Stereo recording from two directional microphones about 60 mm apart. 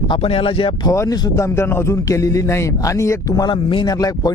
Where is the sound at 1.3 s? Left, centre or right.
Left.